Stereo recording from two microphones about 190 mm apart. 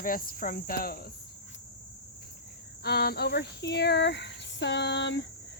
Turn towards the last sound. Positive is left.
turn(degrees=65)  # may be behind; listen again after turning